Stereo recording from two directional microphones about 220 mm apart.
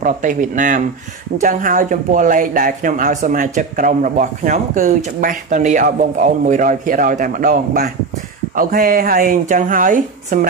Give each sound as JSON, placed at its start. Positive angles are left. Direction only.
{"t": 0.0, "sound": "speech", "side_deg": -35}